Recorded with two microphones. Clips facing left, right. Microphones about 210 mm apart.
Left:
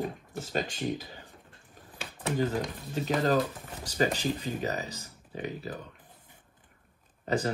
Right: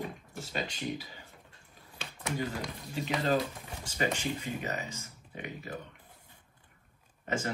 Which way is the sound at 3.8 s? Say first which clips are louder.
Left 4 dB; 35° left (ahead or behind).